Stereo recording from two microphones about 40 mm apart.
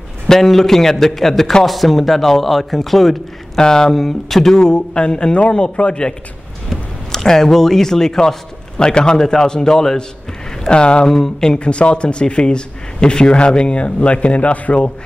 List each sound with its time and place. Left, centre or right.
0.3 s speech: centre
3.5 s speech: centre
3.9 s a man's voice: centre; by 6.1 s left
6.7 s a man's voice: centre
11.6 s a man's voice: left